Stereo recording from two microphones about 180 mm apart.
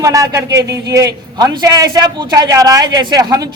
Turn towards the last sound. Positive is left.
turn(degrees=-20)  # may be behind; listen again after turning